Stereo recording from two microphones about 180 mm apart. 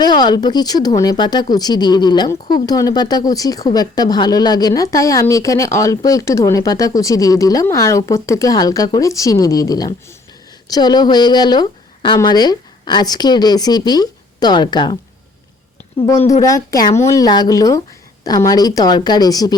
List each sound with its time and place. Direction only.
0.0 s speech: 25° left (ahead or behind)
16.1 s speech: 35° left (ahead or behind)
16.4 s speech: 20° left (ahead or behind)